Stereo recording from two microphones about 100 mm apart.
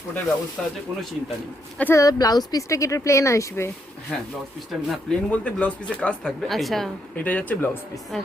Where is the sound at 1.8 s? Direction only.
30° left (ahead or behind).